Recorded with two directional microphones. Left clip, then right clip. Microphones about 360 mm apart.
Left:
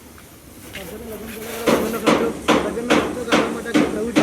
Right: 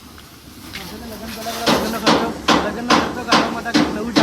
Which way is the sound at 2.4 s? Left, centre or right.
Right.